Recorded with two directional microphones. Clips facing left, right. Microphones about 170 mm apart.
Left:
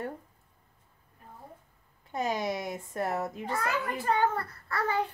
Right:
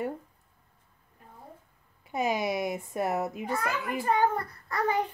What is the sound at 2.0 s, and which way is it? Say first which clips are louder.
A child's voice: right 2 dB; 10° right (ahead or behind).